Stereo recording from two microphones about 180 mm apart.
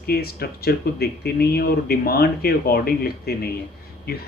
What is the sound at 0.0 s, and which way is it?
Speech, 60° left (ahead or behind).